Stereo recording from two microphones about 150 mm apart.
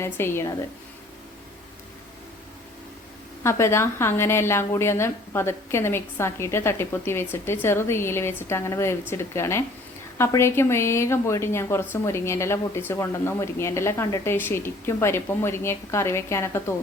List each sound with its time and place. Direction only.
0.0 s a woman's voice: 15° left (ahead or behind)
3.4 s a woman's voice: 20° left (ahead or behind)